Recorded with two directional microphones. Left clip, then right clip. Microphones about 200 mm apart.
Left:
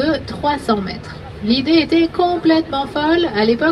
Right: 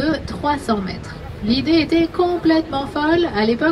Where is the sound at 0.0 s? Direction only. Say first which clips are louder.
Left 3 dB; 55° right (ahead or behind).